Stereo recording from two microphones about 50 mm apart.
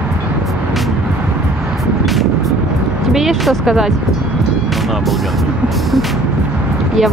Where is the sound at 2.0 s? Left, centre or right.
Centre.